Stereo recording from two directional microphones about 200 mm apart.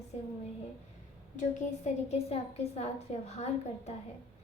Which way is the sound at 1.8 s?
30° left (ahead or behind).